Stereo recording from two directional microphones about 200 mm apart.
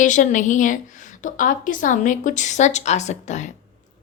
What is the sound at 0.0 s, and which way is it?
A woman's voice, 40° left (ahead or behind).